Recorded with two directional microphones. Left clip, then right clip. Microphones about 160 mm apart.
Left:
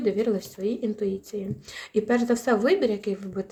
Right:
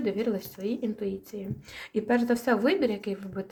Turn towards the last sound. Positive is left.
turn(degrees=15)  # may be behind; listen again after turning